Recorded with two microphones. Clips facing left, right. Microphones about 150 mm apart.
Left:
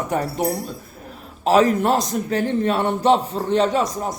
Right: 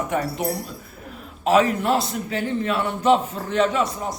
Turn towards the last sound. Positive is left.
turn(degrees=35)  # may be behind; listen again after turning